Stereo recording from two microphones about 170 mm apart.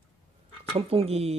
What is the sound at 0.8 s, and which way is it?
Speech, 35° right (ahead or behind).